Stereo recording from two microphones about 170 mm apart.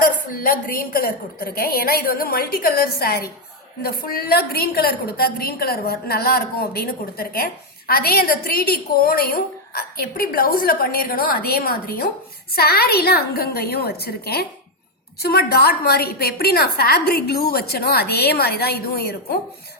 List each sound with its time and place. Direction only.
0.0 s a woman's voice: 55° left (ahead or behind)